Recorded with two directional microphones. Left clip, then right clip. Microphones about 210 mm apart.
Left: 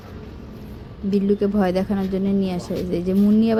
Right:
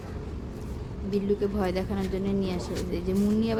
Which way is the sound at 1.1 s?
25° left (ahead or behind).